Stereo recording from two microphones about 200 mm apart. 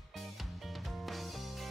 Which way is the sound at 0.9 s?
Centre (ahead or behind).